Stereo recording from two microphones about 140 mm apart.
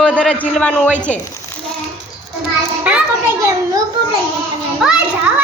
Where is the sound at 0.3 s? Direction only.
Centre (ahead or behind).